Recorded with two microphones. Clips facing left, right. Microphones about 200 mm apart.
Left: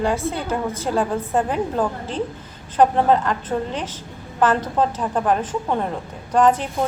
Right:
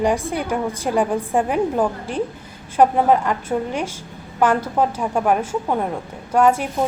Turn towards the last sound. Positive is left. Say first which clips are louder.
# right 1 dB
turn(degrees=-10)  # may be behind; listen again after turning